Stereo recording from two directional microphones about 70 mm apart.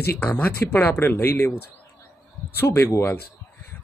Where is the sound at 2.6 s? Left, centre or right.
Left.